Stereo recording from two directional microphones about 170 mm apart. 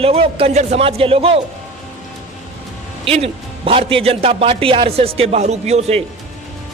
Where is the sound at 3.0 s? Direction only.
35° right (ahead or behind).